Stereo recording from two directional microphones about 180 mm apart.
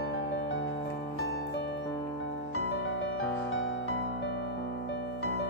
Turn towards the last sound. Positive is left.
turn(degrees=90)